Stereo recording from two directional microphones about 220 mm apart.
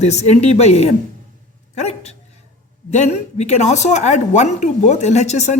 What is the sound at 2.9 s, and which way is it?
A woman's voice, 30° left (ahead or behind).